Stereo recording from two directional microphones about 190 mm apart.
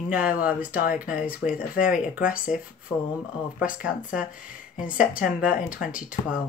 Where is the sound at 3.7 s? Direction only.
45° left (ahead or behind).